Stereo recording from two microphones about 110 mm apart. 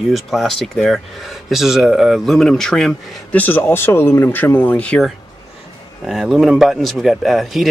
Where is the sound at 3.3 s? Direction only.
20° left (ahead or behind).